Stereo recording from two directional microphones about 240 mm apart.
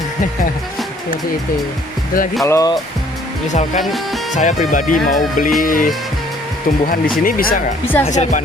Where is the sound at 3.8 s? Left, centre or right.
Centre.